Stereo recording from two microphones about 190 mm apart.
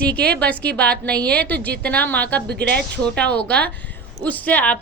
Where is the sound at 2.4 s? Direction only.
60° right (ahead or behind).